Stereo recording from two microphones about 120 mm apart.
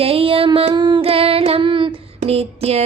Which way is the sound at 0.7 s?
40° right (ahead or behind).